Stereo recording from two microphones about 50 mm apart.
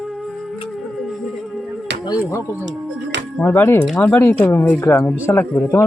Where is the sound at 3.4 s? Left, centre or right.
Left.